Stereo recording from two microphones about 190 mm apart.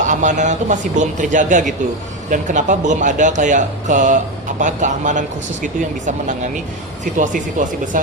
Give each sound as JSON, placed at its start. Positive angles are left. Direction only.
{"t": 0.0, "sound": "speech", "side_deg": -40}